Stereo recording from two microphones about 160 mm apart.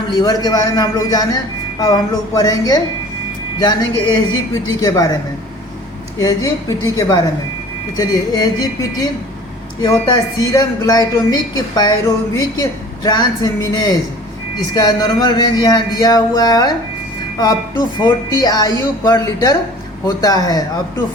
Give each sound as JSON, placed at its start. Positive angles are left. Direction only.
{"t": 0.1, "sound": "music", "side_deg": 25}
{"t": 6.1, "sound": "music", "side_deg": 20}
{"t": 10.4, "sound": "music", "side_deg": 25}